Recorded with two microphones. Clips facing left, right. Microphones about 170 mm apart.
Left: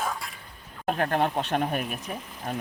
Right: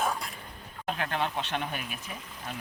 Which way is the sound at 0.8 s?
45° left (ahead or behind).